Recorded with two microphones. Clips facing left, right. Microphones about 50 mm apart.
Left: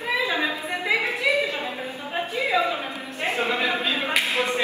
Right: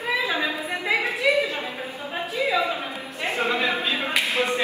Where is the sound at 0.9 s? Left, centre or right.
Right.